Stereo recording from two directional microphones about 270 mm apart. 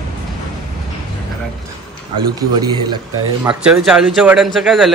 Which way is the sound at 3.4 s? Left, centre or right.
Centre.